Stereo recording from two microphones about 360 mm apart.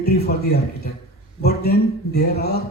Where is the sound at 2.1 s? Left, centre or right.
Left.